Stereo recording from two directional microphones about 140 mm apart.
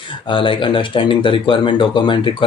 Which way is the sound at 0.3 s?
35° left (ahead or behind).